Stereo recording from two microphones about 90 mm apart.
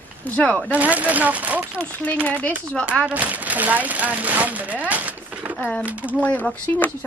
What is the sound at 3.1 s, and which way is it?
Speech, 15° right (ahead or behind).